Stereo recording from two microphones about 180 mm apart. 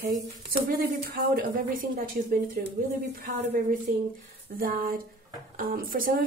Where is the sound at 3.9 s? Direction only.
50° right (ahead or behind).